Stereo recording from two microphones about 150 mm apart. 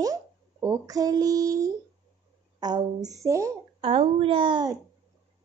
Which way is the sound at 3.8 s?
40° right (ahead or behind).